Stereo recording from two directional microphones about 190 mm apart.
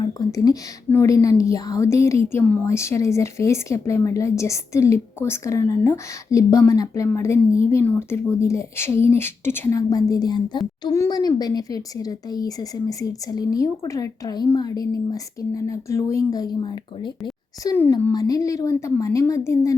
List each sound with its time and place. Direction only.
0.0 s a woman's voice: 20° left (ahead or behind)